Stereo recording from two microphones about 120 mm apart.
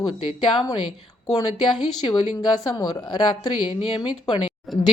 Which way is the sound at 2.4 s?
35° left (ahead or behind).